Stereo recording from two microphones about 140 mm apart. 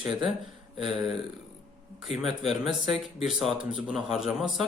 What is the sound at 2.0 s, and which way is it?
Speech, centre (ahead or behind).